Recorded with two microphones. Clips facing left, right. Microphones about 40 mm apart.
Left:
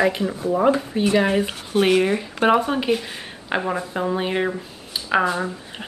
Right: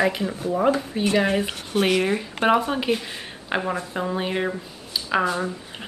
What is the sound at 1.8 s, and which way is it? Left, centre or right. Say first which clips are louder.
Speech: left 4 dB; left.